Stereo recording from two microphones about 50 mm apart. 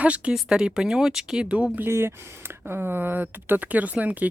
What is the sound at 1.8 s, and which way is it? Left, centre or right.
Speech, right.